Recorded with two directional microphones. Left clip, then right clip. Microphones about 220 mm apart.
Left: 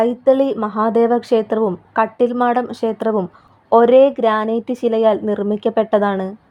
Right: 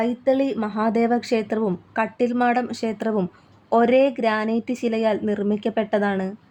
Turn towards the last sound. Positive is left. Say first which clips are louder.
# left 6 dB
turn(degrees=10)  # may be behind; listen again after turning